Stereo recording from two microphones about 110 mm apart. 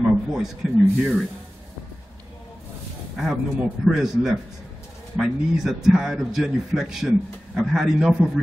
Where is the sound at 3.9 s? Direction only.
5° right (ahead or behind).